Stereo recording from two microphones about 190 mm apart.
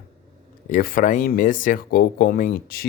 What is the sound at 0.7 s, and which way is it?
Speech, 50° left (ahead or behind).